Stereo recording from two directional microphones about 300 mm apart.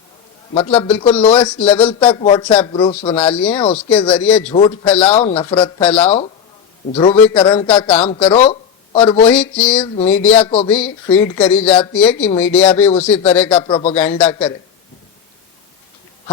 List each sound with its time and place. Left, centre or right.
0.5 s a man's voice: centre
4.9 s speech: centre
5.1 s a man's voice: centre
9.2 s speech: centre
10.4 s speech: centre
11.1 s speech: centre
13.6 s a man's voice: centre
13.9 s a man's voice: centre